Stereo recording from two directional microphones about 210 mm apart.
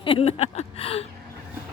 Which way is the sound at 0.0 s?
25° left (ahead or behind).